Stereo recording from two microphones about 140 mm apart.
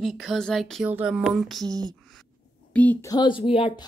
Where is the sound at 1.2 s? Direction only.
Centre (ahead or behind).